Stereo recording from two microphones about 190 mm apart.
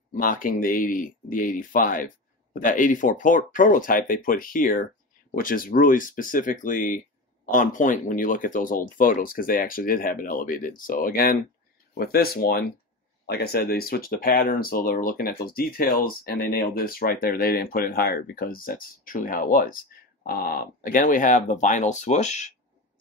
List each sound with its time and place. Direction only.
0.1 s speech: 45° left (ahead or behind)